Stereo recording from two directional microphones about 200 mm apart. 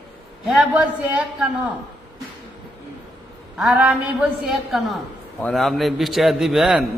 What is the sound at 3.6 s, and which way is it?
A man's voice, 5° right (ahead or behind).